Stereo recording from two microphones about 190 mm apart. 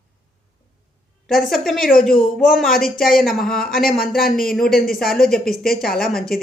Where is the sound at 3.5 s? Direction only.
50° left (ahead or behind).